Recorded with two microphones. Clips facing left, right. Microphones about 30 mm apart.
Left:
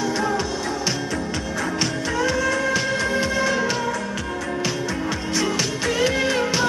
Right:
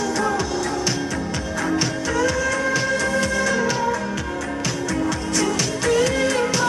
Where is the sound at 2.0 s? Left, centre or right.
Centre.